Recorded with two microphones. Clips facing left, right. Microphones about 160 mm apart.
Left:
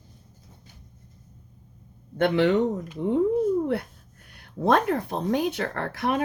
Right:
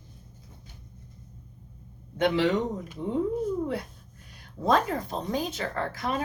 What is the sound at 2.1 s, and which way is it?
Speech, 60° left (ahead or behind).